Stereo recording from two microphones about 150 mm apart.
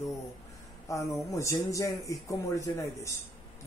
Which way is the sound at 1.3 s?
20° left (ahead or behind).